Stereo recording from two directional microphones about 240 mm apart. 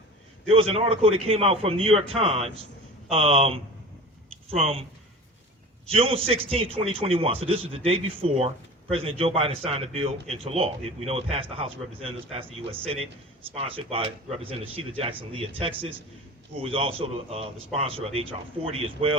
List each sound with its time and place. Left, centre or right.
0.5 s a man's voice: right
4.3 s a sound: right
5.8 s a man's voice: right